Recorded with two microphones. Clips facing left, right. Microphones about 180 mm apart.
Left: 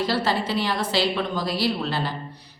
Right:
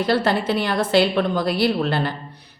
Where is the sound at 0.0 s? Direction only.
55° right (ahead or behind).